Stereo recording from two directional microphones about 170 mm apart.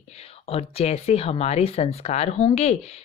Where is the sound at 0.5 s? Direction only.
35° left (ahead or behind).